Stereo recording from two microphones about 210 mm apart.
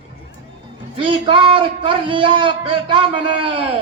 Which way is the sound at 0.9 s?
25° right (ahead or behind).